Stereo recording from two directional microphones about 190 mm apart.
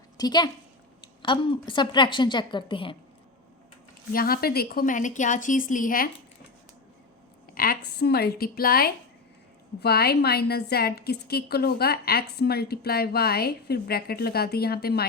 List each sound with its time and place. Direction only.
0.2 s a woman's voice: 20° left (ahead or behind)
4.1 s a woman's voice: 50° left (ahead or behind)
7.5 s a woman's voice: 50° left (ahead or behind)